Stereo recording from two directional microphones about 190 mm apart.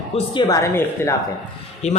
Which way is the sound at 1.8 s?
35° left (ahead or behind).